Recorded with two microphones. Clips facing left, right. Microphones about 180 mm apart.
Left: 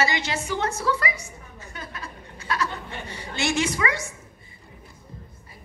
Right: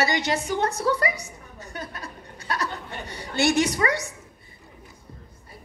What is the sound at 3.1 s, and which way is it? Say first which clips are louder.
Speech: right 5 dB; 60° right (ahead or behind).